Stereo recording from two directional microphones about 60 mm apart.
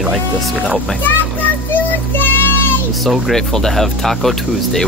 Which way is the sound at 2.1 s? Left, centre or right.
Left.